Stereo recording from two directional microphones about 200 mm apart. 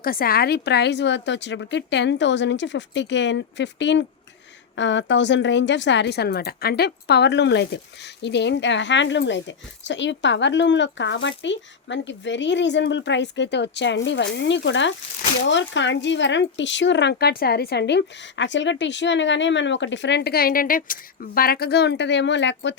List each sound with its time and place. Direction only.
0.0 s a woman's voice: 45° left (ahead or behind); by 22.7 s 65° left (ahead or behind)